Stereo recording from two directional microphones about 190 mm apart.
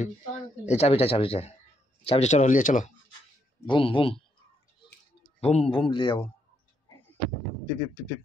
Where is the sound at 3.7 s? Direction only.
25° left (ahead or behind).